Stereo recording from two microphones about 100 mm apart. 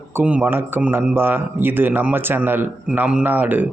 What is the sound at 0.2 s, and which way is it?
Speech, 15° right (ahead or behind).